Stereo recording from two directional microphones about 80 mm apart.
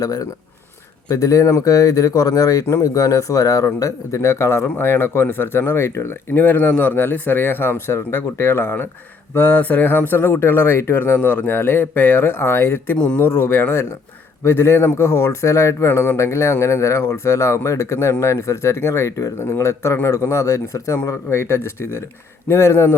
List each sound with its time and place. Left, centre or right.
0.0 s speech: left
13.0 s speech: centre
13.2 s speech: left